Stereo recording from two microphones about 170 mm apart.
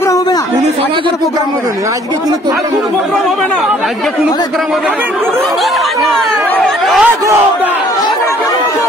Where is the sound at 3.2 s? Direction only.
Centre (ahead or behind).